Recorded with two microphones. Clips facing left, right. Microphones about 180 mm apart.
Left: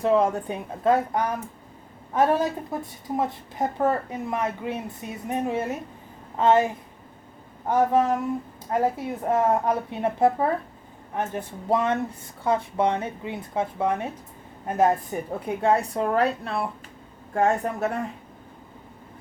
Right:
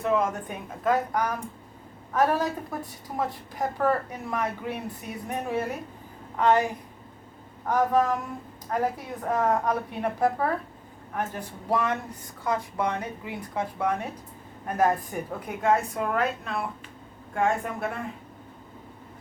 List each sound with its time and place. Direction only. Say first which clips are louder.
0.0 s a woman's voice: left 4 dB; 35° left (ahead or behind)